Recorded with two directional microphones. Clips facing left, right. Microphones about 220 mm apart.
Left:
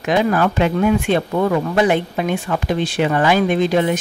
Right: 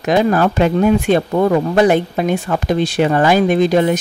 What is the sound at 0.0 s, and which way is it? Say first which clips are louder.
Speech: right 3 dB; 40° right (ahead or behind).